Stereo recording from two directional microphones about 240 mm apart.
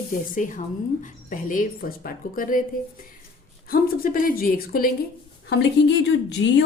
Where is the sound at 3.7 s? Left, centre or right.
Left.